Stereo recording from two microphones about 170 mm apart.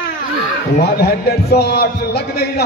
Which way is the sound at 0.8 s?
70° left (ahead or behind).